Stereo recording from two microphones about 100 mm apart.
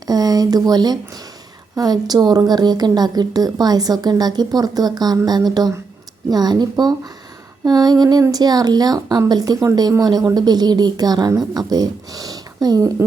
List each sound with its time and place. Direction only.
0.1 s a woman's voice: 40° right (ahead or behind)